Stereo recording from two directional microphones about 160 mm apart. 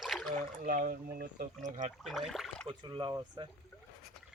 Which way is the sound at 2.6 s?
30° right (ahead or behind).